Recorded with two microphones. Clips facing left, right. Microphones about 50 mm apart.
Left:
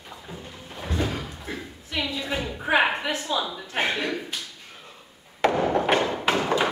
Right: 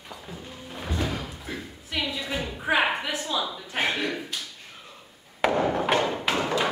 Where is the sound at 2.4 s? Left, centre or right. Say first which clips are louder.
Left 2 dB; centre.